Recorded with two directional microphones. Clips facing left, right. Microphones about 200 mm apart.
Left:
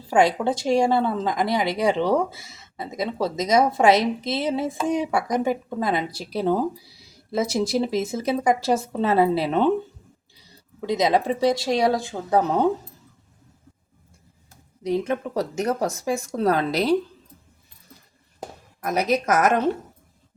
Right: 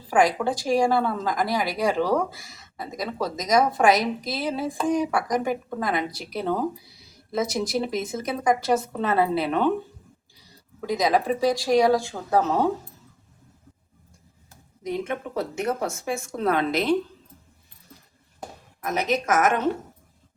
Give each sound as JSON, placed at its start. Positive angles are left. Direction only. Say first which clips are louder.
{"t": 0.1, "sound": "a woman's voice", "louder": "left 2 dB", "side_deg": 25}
{"t": 10.8, "sound": "a woman's voice", "louder": "left 2 dB", "side_deg": 25}
{"t": 14.8, "sound": "speech", "louder": "left 5 dB", "side_deg": 35}
{"t": 18.8, "sound": "speech", "louder": "left 3 dB", "side_deg": 40}